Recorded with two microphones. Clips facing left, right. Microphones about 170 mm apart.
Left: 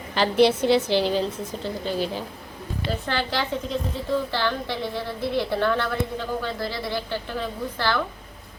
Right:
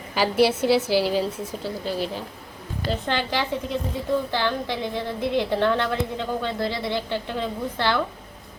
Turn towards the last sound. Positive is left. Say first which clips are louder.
# right 1 dB
turn(degrees=-20)  # may be behind; listen again after turning